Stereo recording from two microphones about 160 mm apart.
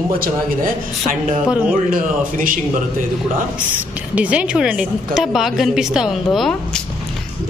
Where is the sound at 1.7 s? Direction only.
60° right (ahead or behind).